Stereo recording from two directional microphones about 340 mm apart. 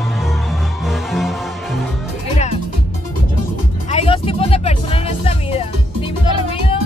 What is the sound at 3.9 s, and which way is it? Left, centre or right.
Music, centre.